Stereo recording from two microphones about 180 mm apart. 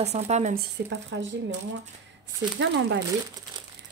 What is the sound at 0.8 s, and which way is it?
Speech, 65° right (ahead or behind).